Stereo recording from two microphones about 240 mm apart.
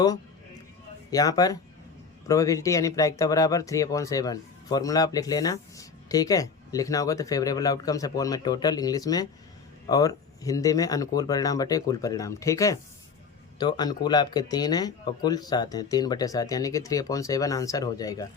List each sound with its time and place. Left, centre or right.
1.1 s speech: centre